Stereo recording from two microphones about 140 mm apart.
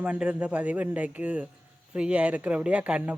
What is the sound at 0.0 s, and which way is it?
Speech, 10° right (ahead or behind).